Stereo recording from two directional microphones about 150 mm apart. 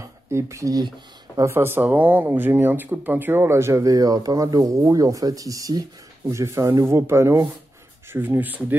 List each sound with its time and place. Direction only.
0.3 s speech: 20° right (ahead or behind)